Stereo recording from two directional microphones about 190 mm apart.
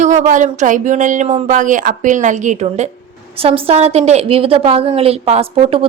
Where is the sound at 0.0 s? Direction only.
40° right (ahead or behind).